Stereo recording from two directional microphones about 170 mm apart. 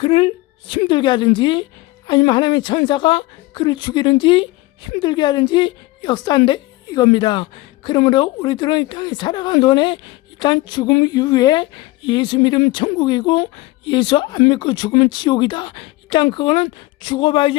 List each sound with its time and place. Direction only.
0.0 s a woman's voice: 30° left (ahead or behind)